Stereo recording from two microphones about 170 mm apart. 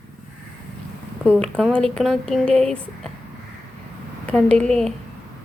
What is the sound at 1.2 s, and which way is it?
Speech, 5° left (ahead or behind).